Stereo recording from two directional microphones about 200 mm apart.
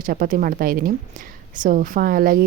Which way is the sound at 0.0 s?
45° right (ahead or behind).